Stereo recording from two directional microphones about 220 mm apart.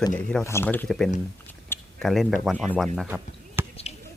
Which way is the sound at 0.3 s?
10° left (ahead or behind).